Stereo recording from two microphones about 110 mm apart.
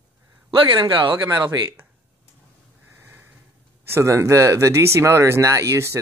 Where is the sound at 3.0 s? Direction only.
20° right (ahead or behind).